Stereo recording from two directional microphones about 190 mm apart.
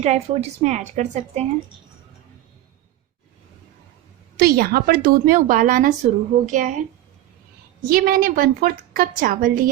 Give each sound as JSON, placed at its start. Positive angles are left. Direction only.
{"t": 0.0, "sound": "a woman's voice", "side_deg": -35}
{"t": 4.4, "sound": "a woman's voice", "side_deg": -55}
{"t": 7.9, "sound": "a woman's voice", "side_deg": -50}